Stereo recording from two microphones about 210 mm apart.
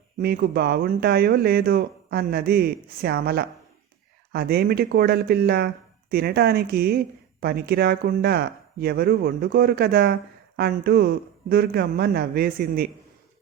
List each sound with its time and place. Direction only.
0.2 s speech: 50° right (ahead or behind)